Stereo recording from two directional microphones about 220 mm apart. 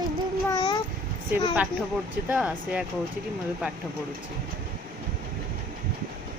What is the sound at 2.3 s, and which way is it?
Speech, 5° right (ahead or behind).